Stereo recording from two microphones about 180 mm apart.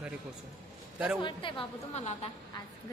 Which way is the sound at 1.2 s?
30° left (ahead or behind).